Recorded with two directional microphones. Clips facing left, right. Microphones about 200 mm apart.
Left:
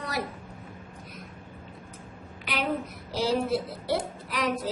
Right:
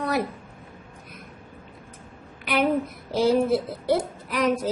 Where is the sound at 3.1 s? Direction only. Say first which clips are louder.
Right 6 dB; 50° right (ahead or behind).